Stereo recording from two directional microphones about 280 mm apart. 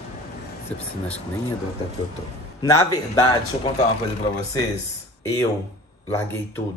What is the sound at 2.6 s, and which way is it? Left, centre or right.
Speech, centre.